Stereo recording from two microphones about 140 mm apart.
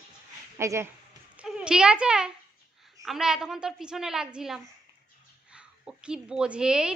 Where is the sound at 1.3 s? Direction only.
5° right (ahead or behind).